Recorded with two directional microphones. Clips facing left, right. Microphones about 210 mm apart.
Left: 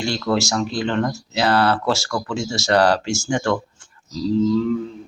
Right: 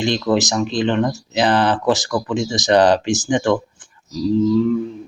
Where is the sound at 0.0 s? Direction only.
20° right (ahead or behind).